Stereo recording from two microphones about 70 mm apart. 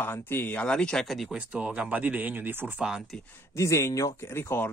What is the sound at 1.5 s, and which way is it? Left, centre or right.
Speech, right.